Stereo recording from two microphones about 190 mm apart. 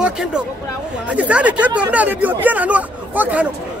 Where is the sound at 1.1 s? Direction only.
5° right (ahead or behind).